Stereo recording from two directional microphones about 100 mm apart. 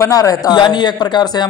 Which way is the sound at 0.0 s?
35° left (ahead or behind).